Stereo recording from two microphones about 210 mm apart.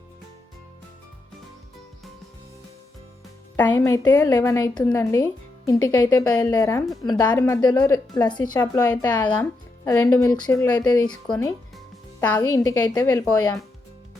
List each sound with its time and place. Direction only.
3.5 s a woman's voice: 15° left (ahead or behind)